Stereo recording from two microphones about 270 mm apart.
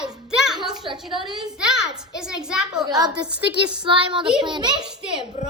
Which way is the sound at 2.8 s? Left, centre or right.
Centre.